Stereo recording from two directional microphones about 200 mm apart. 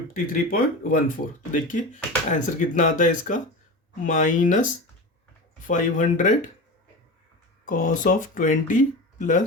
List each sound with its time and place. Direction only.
0.1 s speech: 45° left (ahead or behind)
7.6 s speech: 40° left (ahead or behind)